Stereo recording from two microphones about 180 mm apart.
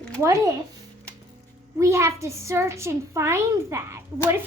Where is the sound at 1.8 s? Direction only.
15° right (ahead or behind).